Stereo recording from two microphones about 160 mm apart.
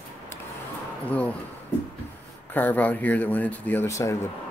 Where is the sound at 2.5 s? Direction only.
10° left (ahead or behind).